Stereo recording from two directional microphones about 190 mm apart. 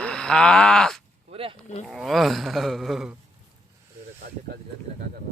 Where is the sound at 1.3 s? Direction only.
30° right (ahead or behind).